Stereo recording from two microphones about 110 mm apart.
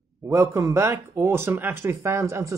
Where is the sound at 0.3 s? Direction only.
30° right (ahead or behind).